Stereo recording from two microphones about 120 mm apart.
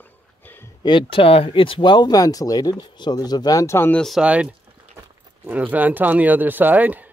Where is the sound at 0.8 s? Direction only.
45° left (ahead or behind); by 3.9 s 25° left (ahead or behind).